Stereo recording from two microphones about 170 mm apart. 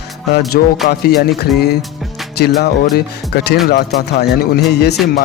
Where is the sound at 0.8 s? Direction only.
70° left (ahead or behind).